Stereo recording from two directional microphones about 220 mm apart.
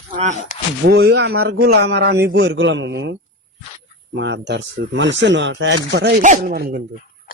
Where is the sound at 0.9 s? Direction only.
45° right (ahead or behind).